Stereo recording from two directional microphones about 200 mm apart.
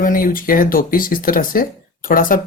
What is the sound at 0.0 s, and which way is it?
Speech, 45° left (ahead or behind).